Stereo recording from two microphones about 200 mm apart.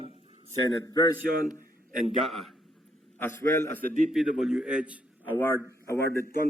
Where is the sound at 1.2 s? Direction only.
45° right (ahead or behind).